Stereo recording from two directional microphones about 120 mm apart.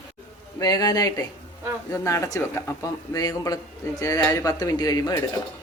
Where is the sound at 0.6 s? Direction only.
35° left (ahead or behind).